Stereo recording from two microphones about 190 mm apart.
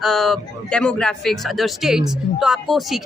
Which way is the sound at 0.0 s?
Centre (ahead or behind).